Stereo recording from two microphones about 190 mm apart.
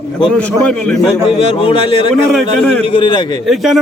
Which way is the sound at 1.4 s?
30° left (ahead or behind).